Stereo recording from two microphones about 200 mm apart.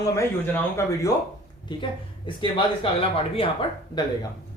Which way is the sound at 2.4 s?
25° left (ahead or behind).